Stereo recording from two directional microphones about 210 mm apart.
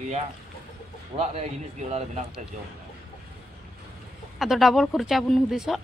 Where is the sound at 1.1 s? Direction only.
30° right (ahead or behind).